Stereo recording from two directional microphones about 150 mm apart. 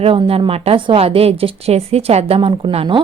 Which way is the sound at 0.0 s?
40° right (ahead or behind).